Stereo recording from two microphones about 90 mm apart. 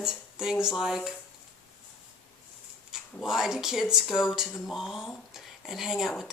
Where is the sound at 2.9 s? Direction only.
5° right (ahead or behind).